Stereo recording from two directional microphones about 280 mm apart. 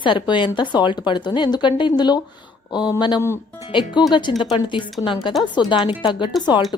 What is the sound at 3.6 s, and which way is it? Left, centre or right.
Speech, centre.